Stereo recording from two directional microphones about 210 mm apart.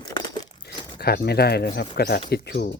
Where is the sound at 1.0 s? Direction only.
50° left (ahead or behind).